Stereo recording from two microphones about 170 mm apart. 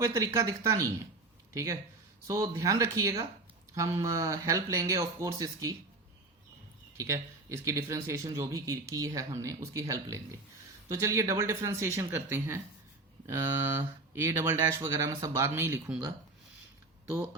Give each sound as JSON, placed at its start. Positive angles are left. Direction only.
{"t": 0.0, "sound": "speech", "side_deg": -15}
{"t": 6.9, "sound": "speech", "side_deg": -15}